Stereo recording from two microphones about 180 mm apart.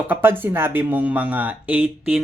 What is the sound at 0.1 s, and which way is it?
Speech, 10° right (ahead or behind).